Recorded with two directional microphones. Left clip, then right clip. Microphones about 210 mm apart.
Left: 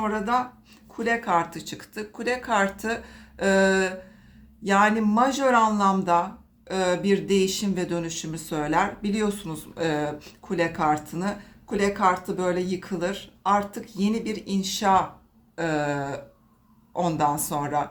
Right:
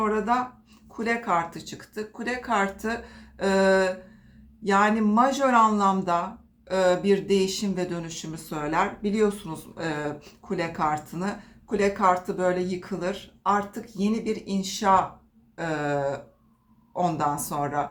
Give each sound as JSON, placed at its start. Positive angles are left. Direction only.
{"t": 0.0, "sound": "speech", "side_deg": 20}